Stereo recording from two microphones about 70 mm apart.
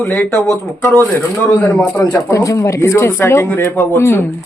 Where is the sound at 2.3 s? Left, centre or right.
Left.